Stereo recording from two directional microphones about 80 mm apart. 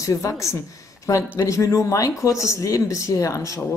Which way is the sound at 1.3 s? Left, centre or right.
Left.